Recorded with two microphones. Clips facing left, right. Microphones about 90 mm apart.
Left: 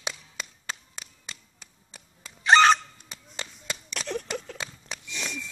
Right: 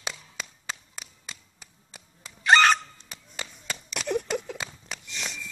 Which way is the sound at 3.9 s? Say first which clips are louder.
Right 5 dB; 10° right (ahead or behind).